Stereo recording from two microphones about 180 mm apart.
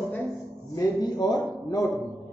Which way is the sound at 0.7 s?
20° left (ahead or behind).